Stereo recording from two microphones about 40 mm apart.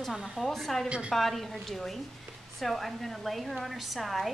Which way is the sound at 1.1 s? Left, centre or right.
Centre.